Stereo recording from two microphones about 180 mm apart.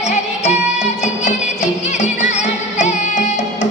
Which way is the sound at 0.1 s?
40° left (ahead or behind).